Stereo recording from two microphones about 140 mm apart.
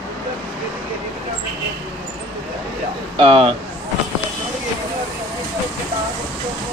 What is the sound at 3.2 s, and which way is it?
Speech, 40° right (ahead or behind).